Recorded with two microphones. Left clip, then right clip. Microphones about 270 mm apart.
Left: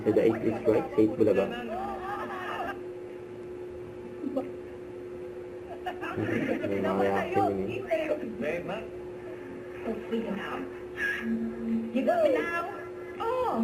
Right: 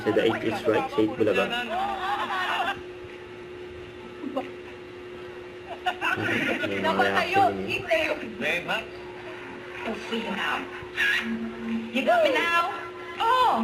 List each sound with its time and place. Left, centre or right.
0.0 s speech: centre
5.8 s speech: centre
9.8 s speech: centre
13.1 s music: centre